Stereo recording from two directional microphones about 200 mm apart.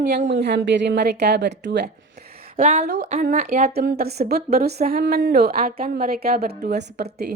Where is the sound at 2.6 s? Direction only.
40° right (ahead or behind).